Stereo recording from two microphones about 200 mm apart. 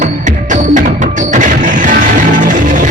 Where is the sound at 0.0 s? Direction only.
40° right (ahead or behind).